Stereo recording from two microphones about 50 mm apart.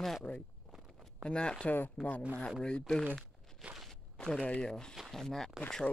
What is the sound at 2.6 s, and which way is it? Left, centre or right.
Speech, centre.